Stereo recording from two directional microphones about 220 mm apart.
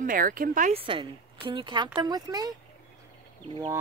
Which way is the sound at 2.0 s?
20° right (ahead or behind).